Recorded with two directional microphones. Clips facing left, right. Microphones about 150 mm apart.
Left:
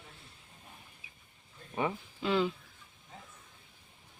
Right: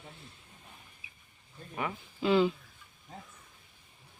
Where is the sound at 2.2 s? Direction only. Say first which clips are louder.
Right 4 dB; 5° right (ahead or behind).